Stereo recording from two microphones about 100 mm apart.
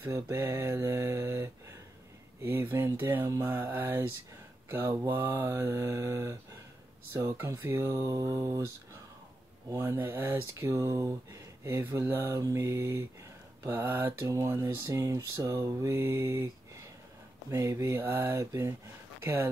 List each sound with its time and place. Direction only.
0.1 s mantra: 25° right (ahead or behind)
4.6 s speech: 20° right (ahead or behind)
5.1 s mantra: 20° right (ahead or behind)
7.2 s speech: 30° right (ahead or behind)
9.7 s mantra: 30° right (ahead or behind)
10.5 s speech: 30° right (ahead or behind)
11.6 s mantra: 25° right (ahead or behind)
12.3 s speech: 30° right (ahead or behind)
13.7 s mantra: 20° right (ahead or behind)
14.2 s mantra: 30° right (ahead or behind)
17.5 s speech: 30° right (ahead or behind)
18.0 s mantra: 20° right (ahead or behind)
18.3 s speech: 35° right (ahead or behind)
19.2 s mantra: 20° right (ahead or behind)